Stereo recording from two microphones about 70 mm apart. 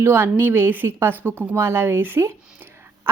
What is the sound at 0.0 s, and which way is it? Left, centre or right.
A woman's voice, right.